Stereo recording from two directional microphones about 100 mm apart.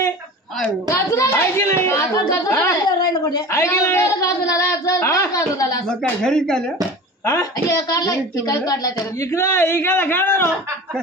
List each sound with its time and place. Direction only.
0.8 s speech: 30° left (ahead or behind)
3.1 s a woman's voice: 45° left (ahead or behind)
3.4 s a woman's voice: 25° left (ahead or behind)
6.2 s speech: 5° left (ahead or behind)
7.2 s a woman's voice: 35° left (ahead or behind)